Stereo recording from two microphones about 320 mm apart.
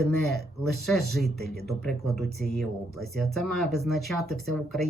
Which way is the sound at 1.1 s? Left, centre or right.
Centre.